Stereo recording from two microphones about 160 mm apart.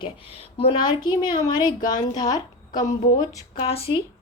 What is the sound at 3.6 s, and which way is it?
Speech, 35° left (ahead or behind).